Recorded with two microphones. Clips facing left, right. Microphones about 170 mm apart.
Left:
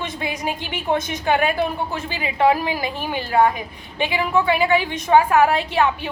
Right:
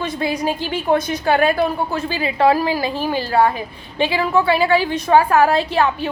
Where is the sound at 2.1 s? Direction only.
15° left (ahead or behind).